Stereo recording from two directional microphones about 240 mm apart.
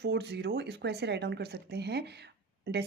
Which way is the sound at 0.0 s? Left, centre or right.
Right.